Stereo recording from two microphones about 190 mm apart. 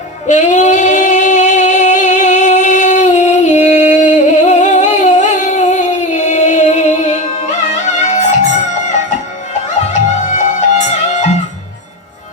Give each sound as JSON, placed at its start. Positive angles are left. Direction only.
{"t": 0.3, "sound": "singing", "side_deg": 40}
{"t": 7.6, "sound": "music", "side_deg": 40}
{"t": 9.9, "sound": "music", "side_deg": 40}